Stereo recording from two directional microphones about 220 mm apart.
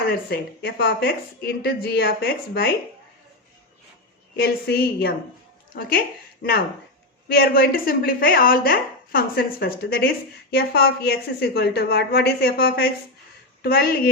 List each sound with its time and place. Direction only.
0.0 s speech: 45° left (ahead or behind)
4.4 s speech: 45° left (ahead or behind)